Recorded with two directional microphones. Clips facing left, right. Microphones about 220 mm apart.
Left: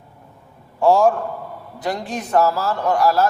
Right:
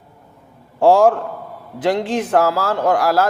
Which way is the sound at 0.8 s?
90° right.